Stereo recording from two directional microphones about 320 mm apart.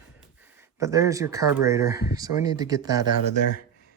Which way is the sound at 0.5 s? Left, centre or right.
Centre.